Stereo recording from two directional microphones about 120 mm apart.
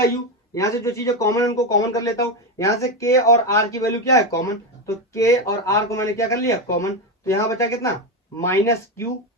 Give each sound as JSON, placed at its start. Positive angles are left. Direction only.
{"t": 0.5, "sound": "speech", "side_deg": 25}